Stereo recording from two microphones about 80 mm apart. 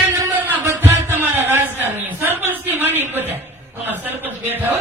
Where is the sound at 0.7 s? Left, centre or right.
Right.